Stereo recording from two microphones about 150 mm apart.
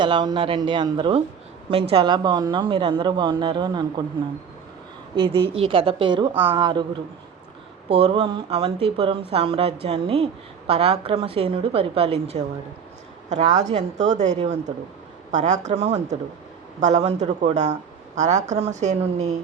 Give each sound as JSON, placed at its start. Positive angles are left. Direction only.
{"t": 0.0, "sound": "speech", "side_deg": -30}
{"t": 5.1, "sound": "a woman's voice", "side_deg": -35}